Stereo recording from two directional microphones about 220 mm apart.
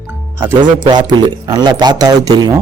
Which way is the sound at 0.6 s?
20° right (ahead or behind).